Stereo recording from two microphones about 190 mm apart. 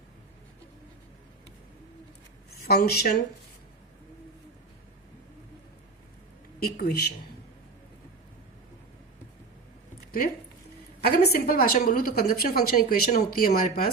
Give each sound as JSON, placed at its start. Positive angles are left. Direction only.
{"t": 2.5, "sound": "speech", "side_deg": 55}
{"t": 6.6, "sound": "a man's voice", "side_deg": 55}
{"t": 11.0, "sound": "a woman's voice", "side_deg": 55}